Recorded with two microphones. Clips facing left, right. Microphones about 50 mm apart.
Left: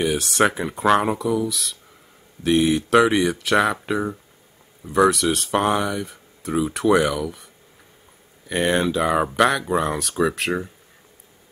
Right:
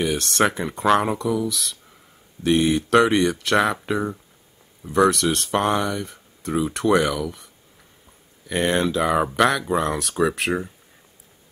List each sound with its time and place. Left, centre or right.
0.0 s speech: centre
8.5 s speech: centre